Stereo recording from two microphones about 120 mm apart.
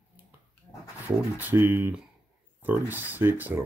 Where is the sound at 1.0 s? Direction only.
15° right (ahead or behind).